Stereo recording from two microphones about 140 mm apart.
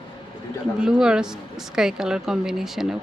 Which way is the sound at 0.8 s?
5° right (ahead or behind).